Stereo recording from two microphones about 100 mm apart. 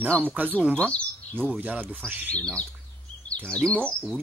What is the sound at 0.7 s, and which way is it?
Speech, 10° left (ahead or behind).